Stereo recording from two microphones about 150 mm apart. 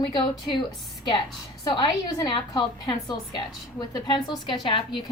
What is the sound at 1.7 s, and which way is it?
A woman's voice, 30° left (ahead or behind).